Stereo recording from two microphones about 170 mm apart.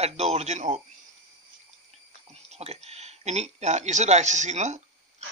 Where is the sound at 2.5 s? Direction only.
40° right (ahead or behind).